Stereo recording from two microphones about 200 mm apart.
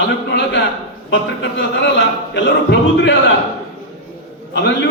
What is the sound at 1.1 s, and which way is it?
Speech, 65° left (ahead or behind).